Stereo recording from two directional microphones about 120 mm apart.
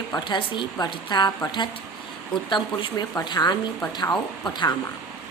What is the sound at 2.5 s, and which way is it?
A woman's voice, 40° left (ahead or behind).